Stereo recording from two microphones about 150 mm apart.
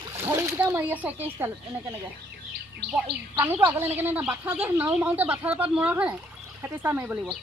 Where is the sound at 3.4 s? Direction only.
15° right (ahead or behind).